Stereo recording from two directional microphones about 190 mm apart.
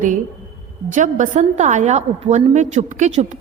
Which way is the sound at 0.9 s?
40° right (ahead or behind).